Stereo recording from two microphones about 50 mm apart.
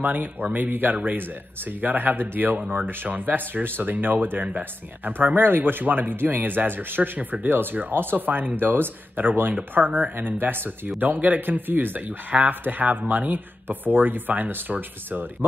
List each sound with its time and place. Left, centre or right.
0.0 s speech: right